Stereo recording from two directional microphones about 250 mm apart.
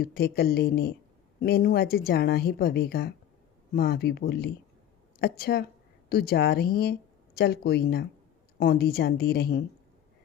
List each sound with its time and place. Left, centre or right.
0.0 s speech: left